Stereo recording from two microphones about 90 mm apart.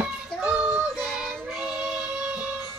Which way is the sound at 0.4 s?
10° right (ahead or behind).